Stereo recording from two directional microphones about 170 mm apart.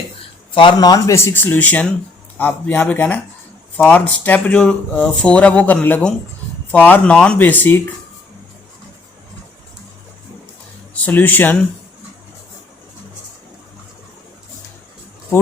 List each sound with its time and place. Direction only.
0.5 s speech: 30° left (ahead or behind); by 7.8 s 10° left (ahead or behind)
10.9 s speech: 10° left (ahead or behind)